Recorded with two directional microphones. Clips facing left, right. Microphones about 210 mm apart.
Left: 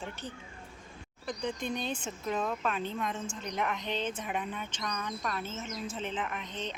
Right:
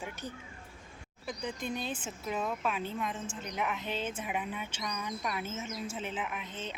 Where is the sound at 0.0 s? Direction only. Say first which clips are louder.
Even; 10° right (ahead or behind).